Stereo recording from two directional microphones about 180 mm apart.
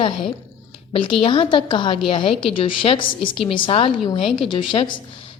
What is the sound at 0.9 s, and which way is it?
A woman's voice, 30° left (ahead or behind).